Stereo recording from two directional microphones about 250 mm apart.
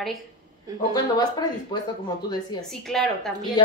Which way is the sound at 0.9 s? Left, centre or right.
Centre.